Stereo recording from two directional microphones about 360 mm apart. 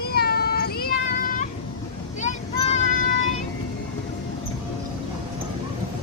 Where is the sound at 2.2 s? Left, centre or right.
Centre.